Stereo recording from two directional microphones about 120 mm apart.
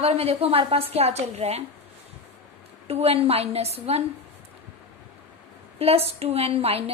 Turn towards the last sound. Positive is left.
turn(degrees=-55)  # may be behind; listen again after turning